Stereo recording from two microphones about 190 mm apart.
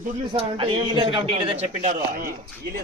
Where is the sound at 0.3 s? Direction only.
25° right (ahead or behind); by 2.3 s 45° right (ahead or behind).